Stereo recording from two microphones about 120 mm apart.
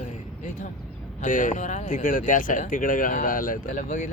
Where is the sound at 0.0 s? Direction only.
85° left.